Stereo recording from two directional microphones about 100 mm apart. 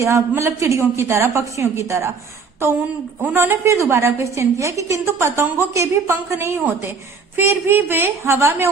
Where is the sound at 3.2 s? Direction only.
25° right (ahead or behind).